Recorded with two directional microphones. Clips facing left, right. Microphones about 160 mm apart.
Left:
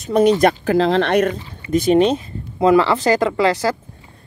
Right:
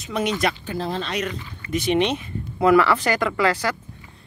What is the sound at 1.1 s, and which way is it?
Speech, 50° left (ahead or behind).